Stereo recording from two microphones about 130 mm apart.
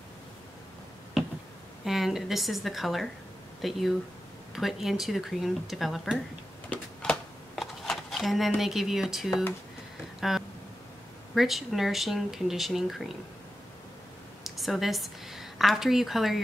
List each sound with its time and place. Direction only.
1.9 s speech: centre (ahead or behind)
6.7 s a sound: 5° left (ahead or behind)
8.5 s speech: centre (ahead or behind)
14.6 s speech: centre (ahead or behind)